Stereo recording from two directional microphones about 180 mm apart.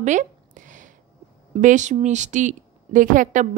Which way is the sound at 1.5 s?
45° right (ahead or behind).